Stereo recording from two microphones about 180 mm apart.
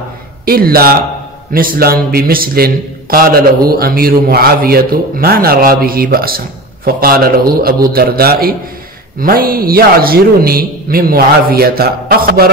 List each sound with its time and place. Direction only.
0.5 s a man's voice: 55° right (ahead or behind)